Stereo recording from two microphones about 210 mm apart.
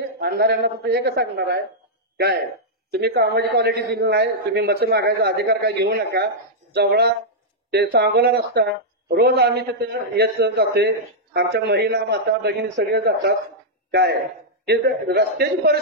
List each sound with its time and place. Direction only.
0.2 s a man's voice: 45° right (ahead or behind)
2.9 s a man's voice: 50° right (ahead or behind)
14.7 s a man's voice: 50° right (ahead or behind)